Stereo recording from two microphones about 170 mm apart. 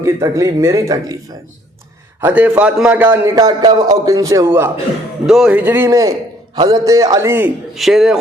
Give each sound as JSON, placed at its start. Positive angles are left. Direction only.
{"t": 0.0, "sound": "speech", "side_deg": -20}
{"t": 2.2, "sound": "a man's voice", "side_deg": -10}
{"t": 3.3, "sound": "speech", "side_deg": -25}
{"t": 5.2, "sound": "a man's voice", "side_deg": -5}
{"t": 7.8, "sound": "speech", "side_deg": 0}